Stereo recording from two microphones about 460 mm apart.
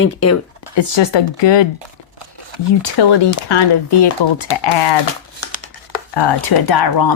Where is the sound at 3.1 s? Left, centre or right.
Left.